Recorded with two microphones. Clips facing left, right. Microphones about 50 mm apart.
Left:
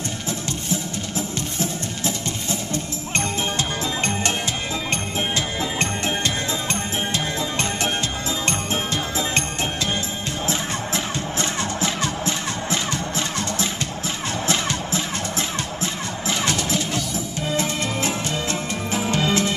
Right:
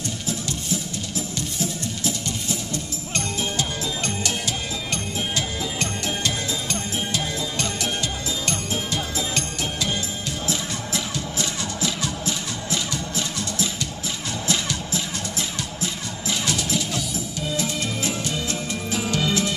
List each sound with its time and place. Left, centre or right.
2.7 s music: left
5.6 s music: left
10.4 s music: left